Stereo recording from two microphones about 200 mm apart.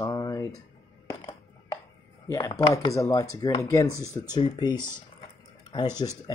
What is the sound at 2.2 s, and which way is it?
Speech, 15° left (ahead or behind).